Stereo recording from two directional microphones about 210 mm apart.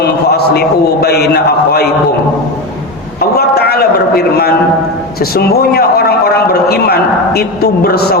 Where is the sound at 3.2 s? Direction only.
50° left (ahead or behind).